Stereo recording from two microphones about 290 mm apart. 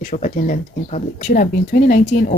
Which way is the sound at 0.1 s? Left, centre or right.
Left.